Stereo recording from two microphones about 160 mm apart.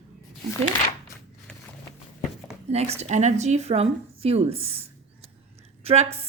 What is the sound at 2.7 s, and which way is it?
A woman's voice, 40° right (ahead or behind).